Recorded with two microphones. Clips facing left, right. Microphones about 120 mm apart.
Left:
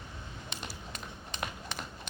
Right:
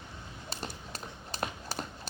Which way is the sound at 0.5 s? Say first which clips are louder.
Right 4 dB; 35° right (ahead or behind).